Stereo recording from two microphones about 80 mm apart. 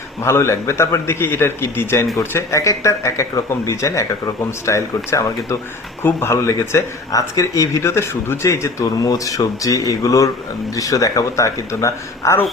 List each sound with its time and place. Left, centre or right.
0.2 s a man's voice: left
2.3 s a man's voice: left
7.1 s a man's voice: left
8.8 s a man's voice: left